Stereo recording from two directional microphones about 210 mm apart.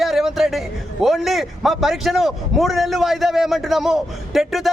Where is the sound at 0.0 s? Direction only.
Centre (ahead or behind).